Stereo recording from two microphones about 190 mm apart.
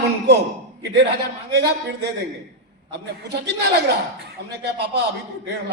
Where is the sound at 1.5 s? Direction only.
65° right (ahead or behind).